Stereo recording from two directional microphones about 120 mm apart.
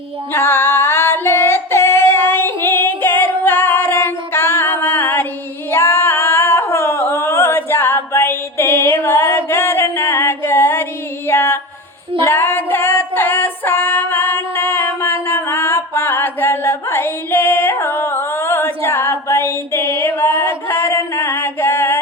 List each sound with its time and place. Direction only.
0.3 s female singing: 20° left (ahead or behind)